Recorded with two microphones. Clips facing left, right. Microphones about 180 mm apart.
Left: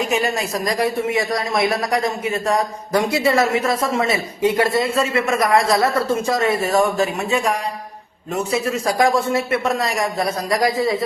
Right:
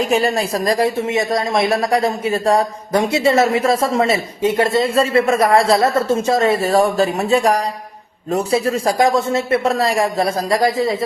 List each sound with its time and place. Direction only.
0.1 s speech: 35° right (ahead or behind)